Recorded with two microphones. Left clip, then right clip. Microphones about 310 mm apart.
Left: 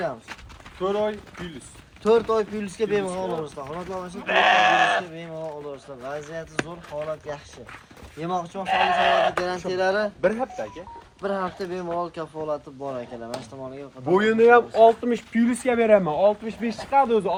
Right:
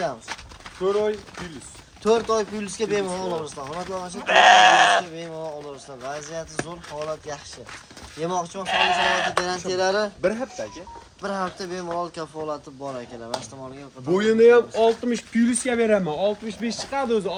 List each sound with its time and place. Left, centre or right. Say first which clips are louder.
0.8 s speech: right 2 dB; left
2.0 s speech: left 1 dB; centre
4.2 s goat: right 5 dB; right
5.1 s speech: right 1 dB; centre
11.2 s speech: left 1 dB; centre
14.1 s speech: right 1 dB; centre